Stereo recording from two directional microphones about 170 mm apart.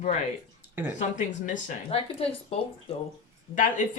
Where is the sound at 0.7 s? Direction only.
10° right (ahead or behind).